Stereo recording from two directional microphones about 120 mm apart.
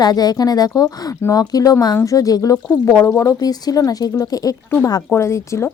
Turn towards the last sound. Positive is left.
turn(degrees=25)  # may be behind; listen again after turning